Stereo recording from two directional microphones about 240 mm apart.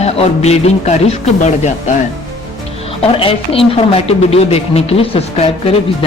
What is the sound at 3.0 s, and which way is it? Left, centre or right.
Speech, left.